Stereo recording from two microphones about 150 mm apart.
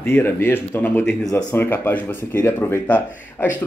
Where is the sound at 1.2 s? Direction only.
25° left (ahead or behind).